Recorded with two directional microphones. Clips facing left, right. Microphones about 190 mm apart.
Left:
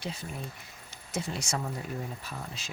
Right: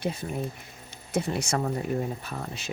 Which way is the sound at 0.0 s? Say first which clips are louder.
Right 8 dB; 55° right (ahead or behind).